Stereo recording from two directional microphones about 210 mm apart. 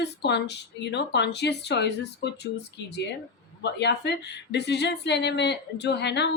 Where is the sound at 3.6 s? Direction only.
55° left (ahead or behind).